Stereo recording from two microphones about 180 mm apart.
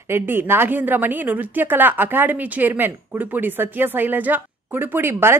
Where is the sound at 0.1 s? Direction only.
10° right (ahead or behind).